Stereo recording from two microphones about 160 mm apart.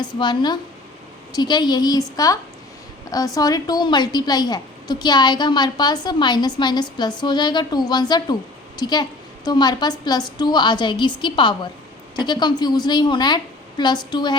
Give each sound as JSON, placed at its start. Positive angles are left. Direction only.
{"t": 0.0, "sound": "a woman's voice", "side_deg": 30}